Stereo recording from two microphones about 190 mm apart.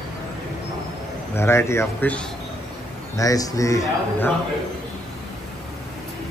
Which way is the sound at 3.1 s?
20° left (ahead or behind).